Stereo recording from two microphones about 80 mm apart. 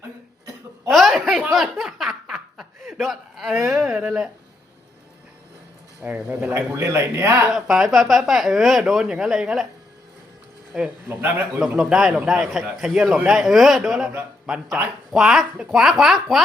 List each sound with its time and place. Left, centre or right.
0.9 s chuckle: centre
1.5 s speech: centre
6.1 s speech: centre
6.7 s speech: right
7.5 s a man's voice: centre
10.7 s a man's voice: centre
11.1 s a man's voice: right
11.8 s a man's voice: centre